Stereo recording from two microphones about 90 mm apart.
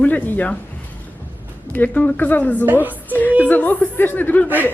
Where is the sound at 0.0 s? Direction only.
20° left (ahead or behind).